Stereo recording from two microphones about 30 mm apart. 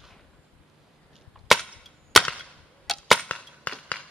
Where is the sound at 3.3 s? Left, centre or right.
Left.